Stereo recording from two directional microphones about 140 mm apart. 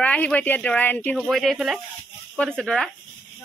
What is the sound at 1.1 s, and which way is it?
Speech, centre (ahead or behind).